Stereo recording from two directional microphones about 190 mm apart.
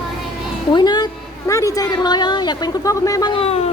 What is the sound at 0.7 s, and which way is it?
A woman's voice, 25° left (ahead or behind).